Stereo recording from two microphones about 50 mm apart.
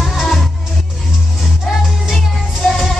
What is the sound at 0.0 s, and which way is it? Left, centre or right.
Music, centre.